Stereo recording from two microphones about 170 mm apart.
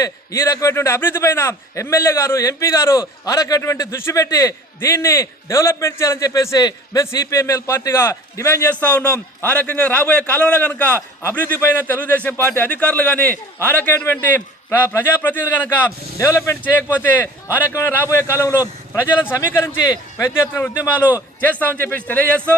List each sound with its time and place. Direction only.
0.0 s a man's voice: 20° left (ahead or behind)